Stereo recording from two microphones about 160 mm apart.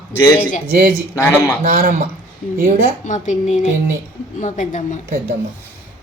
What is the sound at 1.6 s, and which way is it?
Speech, 65° right (ahead or behind).